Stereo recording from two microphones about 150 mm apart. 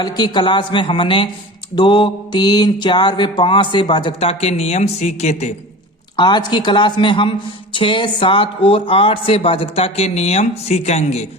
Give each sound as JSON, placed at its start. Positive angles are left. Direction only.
{"t": 0.0, "sound": "mantra", "side_deg": 30}
{"t": 6.1, "sound": "mantra", "side_deg": 30}
{"t": 9.7, "sound": "speech", "side_deg": 40}